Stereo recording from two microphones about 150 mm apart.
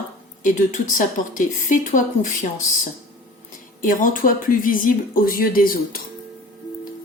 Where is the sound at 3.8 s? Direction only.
65° left (ahead or behind).